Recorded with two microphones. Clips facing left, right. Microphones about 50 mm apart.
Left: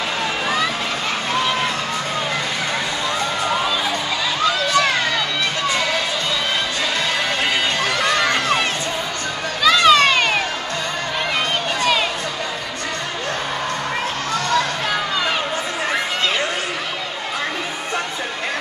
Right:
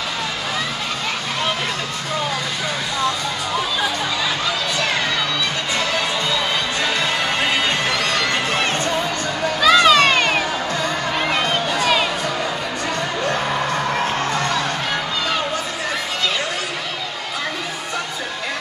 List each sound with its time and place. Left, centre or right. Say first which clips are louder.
9.6 s music: even; centre